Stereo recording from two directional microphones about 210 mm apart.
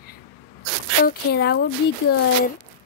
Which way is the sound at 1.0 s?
50° left (ahead or behind).